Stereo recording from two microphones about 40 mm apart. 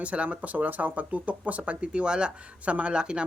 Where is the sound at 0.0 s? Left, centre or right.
Right.